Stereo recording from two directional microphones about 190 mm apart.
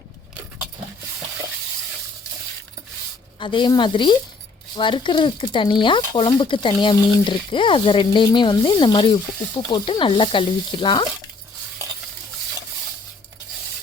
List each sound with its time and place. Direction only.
3.4 s speech: 25° left (ahead or behind)